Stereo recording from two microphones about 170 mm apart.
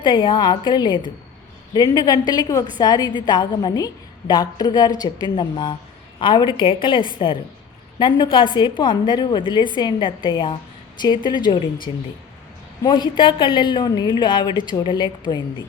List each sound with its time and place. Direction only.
0.0 s a woman's voice: 30° left (ahead or behind)
12.8 s a woman's voice: 25° left (ahead or behind)